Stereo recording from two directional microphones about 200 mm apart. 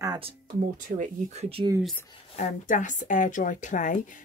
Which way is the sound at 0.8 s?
40° right (ahead or behind).